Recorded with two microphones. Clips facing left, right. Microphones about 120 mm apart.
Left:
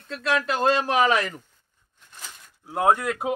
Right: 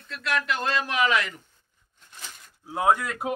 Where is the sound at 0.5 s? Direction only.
30° left (ahead or behind).